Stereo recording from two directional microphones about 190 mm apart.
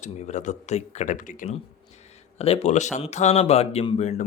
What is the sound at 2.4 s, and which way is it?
Speech, 30° left (ahead or behind).